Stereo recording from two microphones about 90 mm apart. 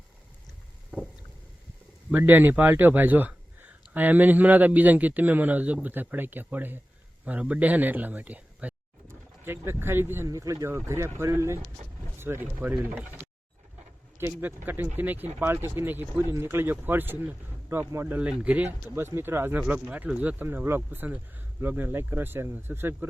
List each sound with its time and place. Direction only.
0.9 s boat: 10° right (ahead or behind)
2.0 s speech: 20° right (ahead or behind)
9.0 s speech: 25° right (ahead or behind)
10.2 s speech: 40° right (ahead or behind); by 15.5 s 20° right (ahead or behind)
15.6 s speech: 30° right (ahead or behind)
19.5 s speech: 15° right (ahead or behind)